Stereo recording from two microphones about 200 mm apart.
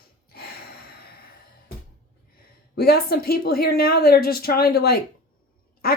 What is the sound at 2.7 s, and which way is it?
Speech, 50° left (ahead or behind).